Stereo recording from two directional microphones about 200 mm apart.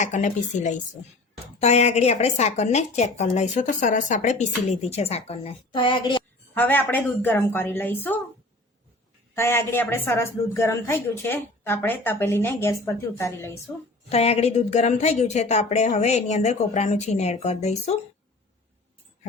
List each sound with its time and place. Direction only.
0.0 s a woman's voice: 40° left (ahead or behind)
6.5 s a woman's voice: 10° left (ahead or behind)
9.3 s a woman's voice: 10° left (ahead or behind)
14.1 s a woman's voice: 30° left (ahead or behind)